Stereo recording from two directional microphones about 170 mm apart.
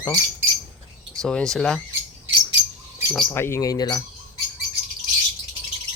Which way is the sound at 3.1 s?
15° left (ahead or behind).